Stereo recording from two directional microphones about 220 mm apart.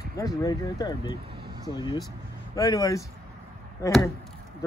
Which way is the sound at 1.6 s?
20° left (ahead or behind).